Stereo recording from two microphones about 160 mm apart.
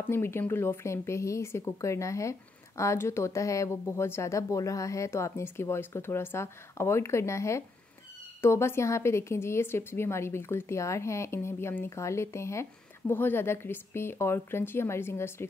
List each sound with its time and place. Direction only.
0.1 s a woman's voice: 15° left (ahead or behind)